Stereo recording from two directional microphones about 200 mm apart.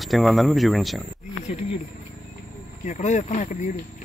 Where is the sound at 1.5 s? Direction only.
35° left (ahead or behind).